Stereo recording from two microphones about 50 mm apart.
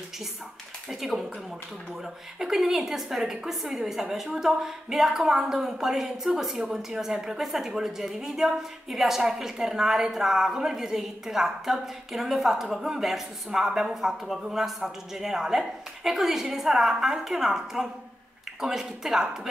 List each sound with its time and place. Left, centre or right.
0.8 s a woman's voice: centre
2.3 s a woman's voice: centre